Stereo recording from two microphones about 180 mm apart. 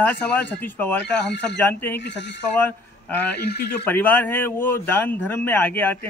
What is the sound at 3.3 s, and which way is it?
Speech, 60° left (ahead or behind).